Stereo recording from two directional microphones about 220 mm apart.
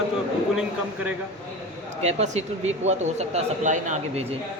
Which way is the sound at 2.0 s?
30° right (ahead or behind).